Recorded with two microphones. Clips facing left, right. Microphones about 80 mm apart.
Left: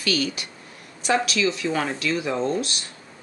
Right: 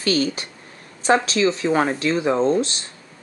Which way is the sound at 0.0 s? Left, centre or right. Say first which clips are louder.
Right 4 dB; right.